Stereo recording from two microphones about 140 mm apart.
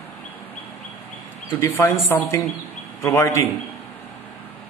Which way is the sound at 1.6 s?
20° left (ahead or behind).